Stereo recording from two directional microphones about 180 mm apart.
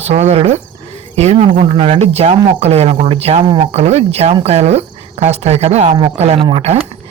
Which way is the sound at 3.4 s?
25° right (ahead or behind).